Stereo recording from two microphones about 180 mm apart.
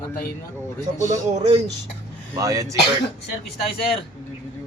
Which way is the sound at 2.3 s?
20° right (ahead or behind).